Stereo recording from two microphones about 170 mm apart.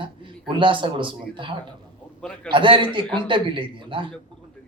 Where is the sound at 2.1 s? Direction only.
5° left (ahead or behind).